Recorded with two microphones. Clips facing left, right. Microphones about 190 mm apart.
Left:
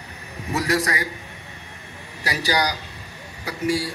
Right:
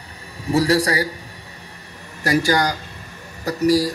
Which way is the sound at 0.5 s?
30° right (ahead or behind).